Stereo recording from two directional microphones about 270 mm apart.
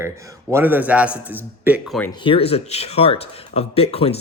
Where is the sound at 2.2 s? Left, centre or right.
Left.